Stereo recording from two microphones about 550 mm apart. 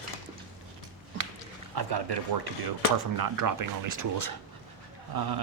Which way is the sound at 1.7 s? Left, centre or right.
Right.